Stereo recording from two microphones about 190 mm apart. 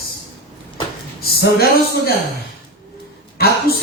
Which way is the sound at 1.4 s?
55° left (ahead or behind).